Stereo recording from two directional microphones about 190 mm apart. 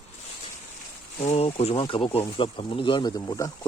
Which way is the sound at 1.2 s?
35° left (ahead or behind).